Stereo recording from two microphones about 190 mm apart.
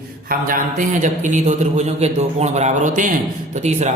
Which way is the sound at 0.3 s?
45° right (ahead or behind).